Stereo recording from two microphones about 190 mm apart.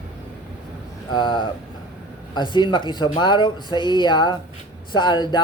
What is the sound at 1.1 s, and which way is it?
Speech, 25° left (ahead or behind).